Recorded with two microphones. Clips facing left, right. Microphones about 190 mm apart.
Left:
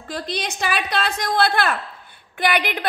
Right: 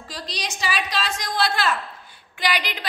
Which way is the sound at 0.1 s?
55° left (ahead or behind).